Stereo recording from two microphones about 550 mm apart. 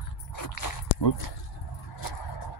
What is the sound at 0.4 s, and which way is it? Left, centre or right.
Biting, left.